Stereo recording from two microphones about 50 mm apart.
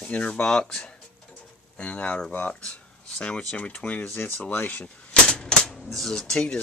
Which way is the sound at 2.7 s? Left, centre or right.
Left.